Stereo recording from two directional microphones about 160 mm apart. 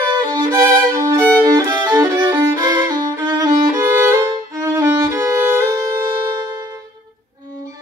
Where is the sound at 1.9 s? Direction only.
15° right (ahead or behind).